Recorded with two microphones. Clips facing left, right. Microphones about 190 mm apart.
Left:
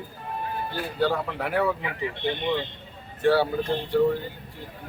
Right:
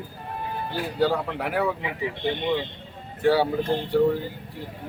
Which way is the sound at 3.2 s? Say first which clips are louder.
Right 1 dB; 10° right (ahead or behind).